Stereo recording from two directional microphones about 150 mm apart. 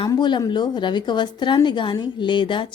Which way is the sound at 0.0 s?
30° left (ahead or behind).